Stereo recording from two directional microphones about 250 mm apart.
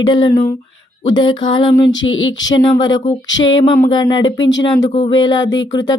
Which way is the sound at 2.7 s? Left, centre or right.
Centre.